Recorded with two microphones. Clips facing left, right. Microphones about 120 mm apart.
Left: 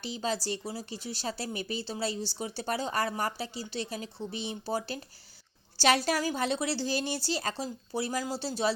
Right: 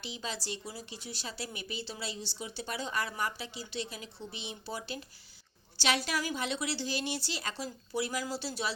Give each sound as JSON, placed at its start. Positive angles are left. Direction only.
{"t": 0.0, "sound": "a woman's voice", "side_deg": 35}